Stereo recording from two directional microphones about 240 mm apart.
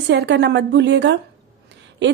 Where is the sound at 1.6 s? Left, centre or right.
Right.